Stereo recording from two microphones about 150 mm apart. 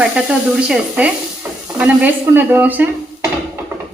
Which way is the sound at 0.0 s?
5° right (ahead or behind).